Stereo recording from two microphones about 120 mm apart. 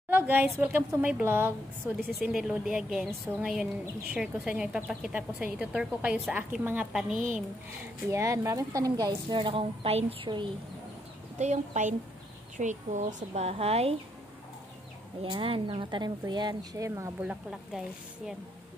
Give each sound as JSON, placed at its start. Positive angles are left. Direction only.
{"t": 0.1, "sound": "speech", "side_deg": -15}
{"t": 2.1, "sound": "a woman's voice", "side_deg": -5}
{"t": 6.9, "sound": "a woman's voice", "side_deg": 0}
{"t": 8.1, "sound": "speech", "side_deg": -25}
{"t": 9.0, "sound": "a woman's voice", "side_deg": -40}
{"t": 11.3, "sound": "a woman's voice", "side_deg": -70}
{"t": 12.5, "sound": "speech", "side_deg": -85}
{"t": 15.3, "sound": "speech", "side_deg": -45}
{"t": 17.2, "sound": "a woman's voice", "side_deg": -5}